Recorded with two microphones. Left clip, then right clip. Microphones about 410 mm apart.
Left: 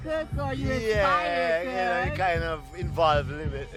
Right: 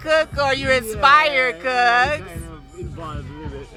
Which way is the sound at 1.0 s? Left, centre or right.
Right.